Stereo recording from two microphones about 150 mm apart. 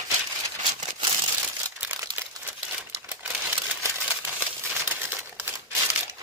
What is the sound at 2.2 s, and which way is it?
Crumpling, 15° right (ahead or behind).